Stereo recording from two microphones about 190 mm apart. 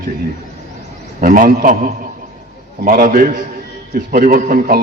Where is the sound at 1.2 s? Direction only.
45° right (ahead or behind).